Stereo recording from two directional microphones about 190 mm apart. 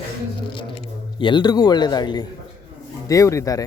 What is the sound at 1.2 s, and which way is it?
Speech, 25° left (ahead or behind).